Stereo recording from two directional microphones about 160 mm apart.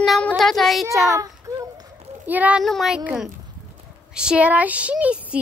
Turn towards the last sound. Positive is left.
turn(degrees=-5)  # may be behind; listen again after turning